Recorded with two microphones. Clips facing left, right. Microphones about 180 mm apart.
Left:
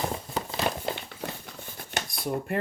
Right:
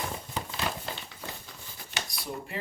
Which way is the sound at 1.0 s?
60° left (ahead or behind).